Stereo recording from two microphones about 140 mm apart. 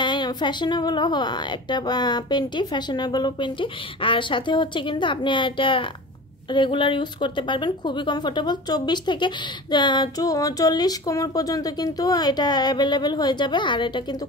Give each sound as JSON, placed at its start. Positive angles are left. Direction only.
{"t": 0.0, "sound": "speech", "side_deg": 35}